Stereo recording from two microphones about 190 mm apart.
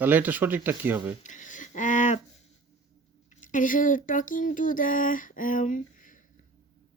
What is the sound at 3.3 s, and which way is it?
Speech, 45° left (ahead or behind).